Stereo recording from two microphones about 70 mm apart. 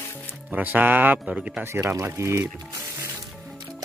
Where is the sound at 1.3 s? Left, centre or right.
Centre.